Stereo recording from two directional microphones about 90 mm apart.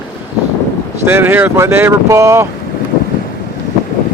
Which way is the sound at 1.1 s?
25° right (ahead or behind).